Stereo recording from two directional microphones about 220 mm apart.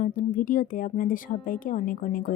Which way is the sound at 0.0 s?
40° left (ahead or behind).